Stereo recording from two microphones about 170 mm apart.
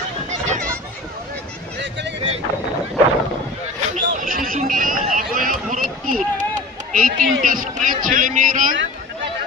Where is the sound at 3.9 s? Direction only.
55° right (ahead or behind).